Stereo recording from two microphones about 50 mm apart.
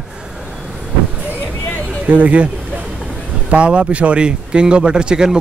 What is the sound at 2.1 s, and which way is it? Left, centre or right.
Speech, right.